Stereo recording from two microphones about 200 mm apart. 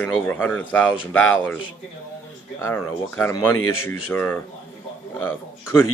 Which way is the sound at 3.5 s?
90° left.